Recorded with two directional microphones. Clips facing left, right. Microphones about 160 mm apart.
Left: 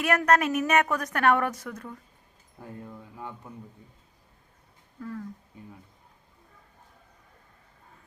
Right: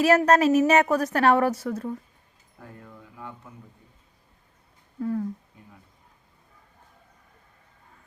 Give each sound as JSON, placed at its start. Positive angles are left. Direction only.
{"t": 0.0, "sound": "a woman's voice", "side_deg": -25}
{"t": 4.9, "sound": "speech", "side_deg": -30}